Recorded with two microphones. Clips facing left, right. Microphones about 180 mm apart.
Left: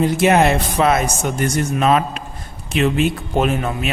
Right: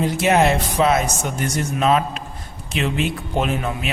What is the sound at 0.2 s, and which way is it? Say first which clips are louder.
A man's voice: left 1 dB; 55° left (ahead or behind).